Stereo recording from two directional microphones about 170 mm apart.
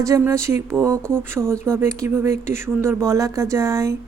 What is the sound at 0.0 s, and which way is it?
Speech, 15° right (ahead or behind).